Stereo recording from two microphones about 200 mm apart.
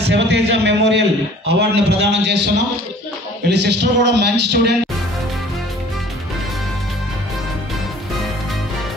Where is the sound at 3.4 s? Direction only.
60° right (ahead or behind).